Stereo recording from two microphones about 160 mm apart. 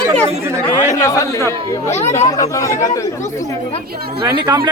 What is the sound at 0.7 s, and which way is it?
A man's voice, 20° left (ahead or behind).